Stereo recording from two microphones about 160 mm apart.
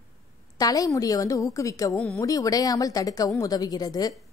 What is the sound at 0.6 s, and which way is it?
A woman's voice, 25° left (ahead or behind).